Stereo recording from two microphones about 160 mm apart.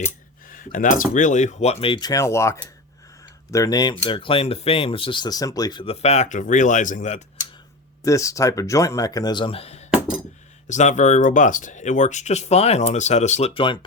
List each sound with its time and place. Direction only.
0.4 s speech: 60° left (ahead or behind); by 5.8 s 25° left (ahead or behind)
5.8 s speech: 40° left (ahead or behind)
8.0 s speech: 20° left (ahead or behind)